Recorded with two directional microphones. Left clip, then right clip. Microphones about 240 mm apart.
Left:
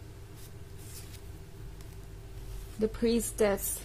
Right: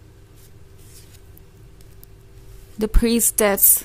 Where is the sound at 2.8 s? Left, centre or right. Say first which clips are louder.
Right 8 dB; right.